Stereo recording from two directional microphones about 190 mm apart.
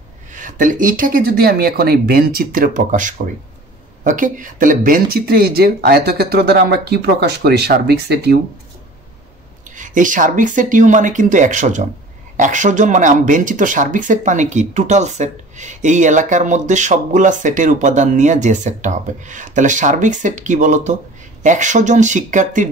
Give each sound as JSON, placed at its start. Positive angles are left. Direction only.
{"t": 0.3, "sound": "speech", "side_deg": -40}
{"t": 9.8, "sound": "speech", "side_deg": -40}